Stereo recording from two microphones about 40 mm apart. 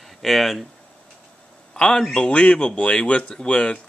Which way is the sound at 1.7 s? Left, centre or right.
Centre.